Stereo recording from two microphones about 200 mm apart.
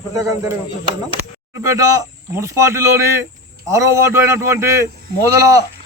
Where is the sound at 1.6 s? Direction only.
15° right (ahead or behind).